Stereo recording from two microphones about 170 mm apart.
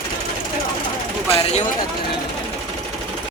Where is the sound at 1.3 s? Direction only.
40° left (ahead or behind).